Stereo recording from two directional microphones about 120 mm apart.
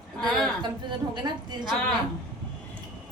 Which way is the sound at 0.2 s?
5° left (ahead or behind).